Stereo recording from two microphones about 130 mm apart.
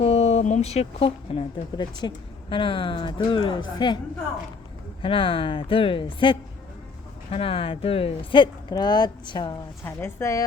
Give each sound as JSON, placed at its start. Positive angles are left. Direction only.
{"t": 0.0, "sound": "a sound", "side_deg": 55}
{"t": 1.7, "sound": "speech", "side_deg": 35}
{"t": 5.0, "sound": "speech", "side_deg": 45}
{"t": 9.8, "sound": "a woman's voice", "side_deg": 20}